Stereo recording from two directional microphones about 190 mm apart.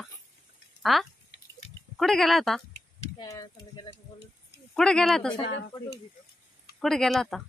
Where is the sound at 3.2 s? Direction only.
20° left (ahead or behind).